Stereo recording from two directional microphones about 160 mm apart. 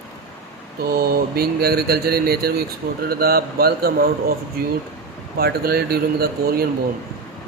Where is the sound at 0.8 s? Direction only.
75° right (ahead or behind).